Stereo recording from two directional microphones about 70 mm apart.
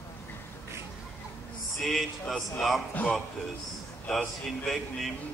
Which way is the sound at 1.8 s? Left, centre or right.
Centre.